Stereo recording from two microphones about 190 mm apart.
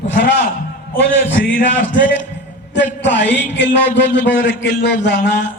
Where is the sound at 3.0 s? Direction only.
70° left (ahead or behind).